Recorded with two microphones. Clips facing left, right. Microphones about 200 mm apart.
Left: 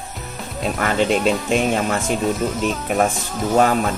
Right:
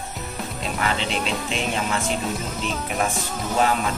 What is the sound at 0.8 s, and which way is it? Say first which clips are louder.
Speech: left 6 dB; 50° left (ahead or behind).